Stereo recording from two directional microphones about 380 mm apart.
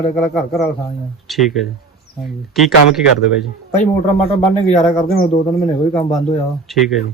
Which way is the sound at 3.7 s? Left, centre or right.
Centre.